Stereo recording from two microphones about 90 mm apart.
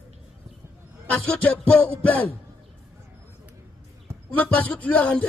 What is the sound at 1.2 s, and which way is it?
Speech, 10° left (ahead or behind).